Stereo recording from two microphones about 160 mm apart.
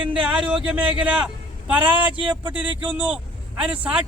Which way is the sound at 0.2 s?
5° right (ahead or behind).